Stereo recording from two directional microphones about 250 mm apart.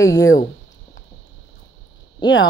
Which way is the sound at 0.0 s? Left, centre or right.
Left.